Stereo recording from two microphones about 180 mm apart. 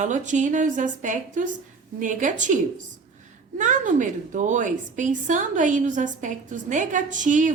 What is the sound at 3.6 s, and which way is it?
A woman's voice, 45° right (ahead or behind).